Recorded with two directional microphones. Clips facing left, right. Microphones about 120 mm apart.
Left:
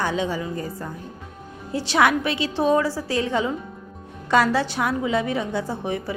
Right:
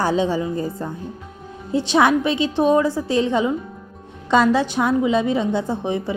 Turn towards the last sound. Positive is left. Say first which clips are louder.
# right 4 dB
turn(degrees=-20)  # may be behind; listen again after turning